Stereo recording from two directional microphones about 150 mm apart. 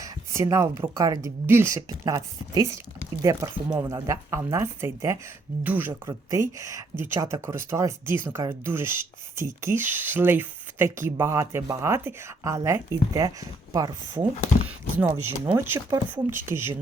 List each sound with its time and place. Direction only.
0.0 s a sound: 20° right (ahead or behind)
0.8 s speech: 25° right (ahead or behind)
14.7 s speech: 10° right (ahead or behind)